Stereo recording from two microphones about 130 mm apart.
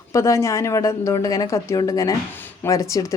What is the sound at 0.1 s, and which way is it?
Speech, 25° left (ahead or behind).